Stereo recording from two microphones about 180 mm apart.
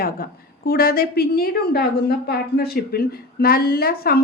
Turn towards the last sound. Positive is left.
turn(degrees=55)  # may be behind; listen again after turning